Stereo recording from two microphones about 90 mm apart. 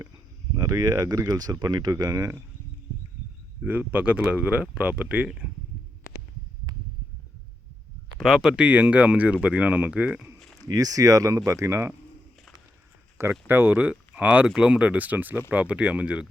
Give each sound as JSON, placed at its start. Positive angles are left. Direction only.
{"t": 0.5, "sound": "speech", "side_deg": -40}
{"t": 3.6, "sound": "speech", "side_deg": -15}
{"t": 8.2, "sound": "speech", "side_deg": 0}
{"t": 8.5, "sound": "speech", "side_deg": -15}
{"t": 10.6, "sound": "speech", "side_deg": -45}
{"t": 13.5, "sound": "speech", "side_deg": -25}